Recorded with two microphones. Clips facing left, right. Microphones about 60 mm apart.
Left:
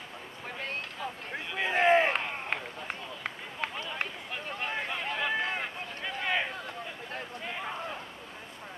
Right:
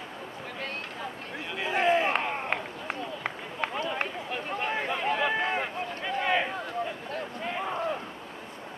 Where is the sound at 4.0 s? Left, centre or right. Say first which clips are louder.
Right 4 dB; centre.